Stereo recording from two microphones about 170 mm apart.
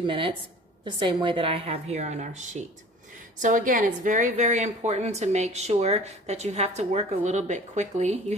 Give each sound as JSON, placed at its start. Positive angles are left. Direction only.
{"t": 0.0, "sound": "a woman's voice", "side_deg": -30}